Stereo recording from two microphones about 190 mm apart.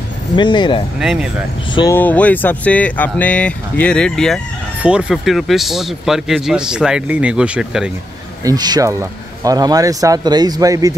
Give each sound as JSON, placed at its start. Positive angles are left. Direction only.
{"t": 0.4, "sound": "speech", "side_deg": 25}
{"t": 0.9, "sound": "speech", "side_deg": -5}
{"t": 2.0, "sound": "speech", "side_deg": 10}
{"t": 8.5, "sound": "speech", "side_deg": -20}